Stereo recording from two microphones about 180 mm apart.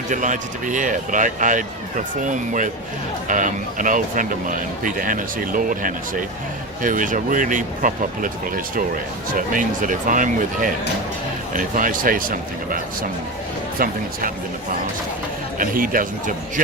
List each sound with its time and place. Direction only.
0.1 s speech: 45° right (ahead or behind)
15.5 s speech: 50° right (ahead or behind)